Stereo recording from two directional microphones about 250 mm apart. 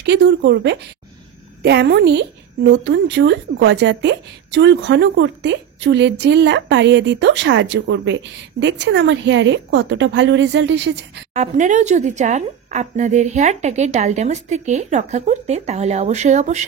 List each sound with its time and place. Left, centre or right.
0.0 s a woman's voice: right
11.3 s a woman's voice: right